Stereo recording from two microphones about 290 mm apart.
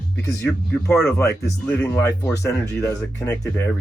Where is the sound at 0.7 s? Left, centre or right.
Centre.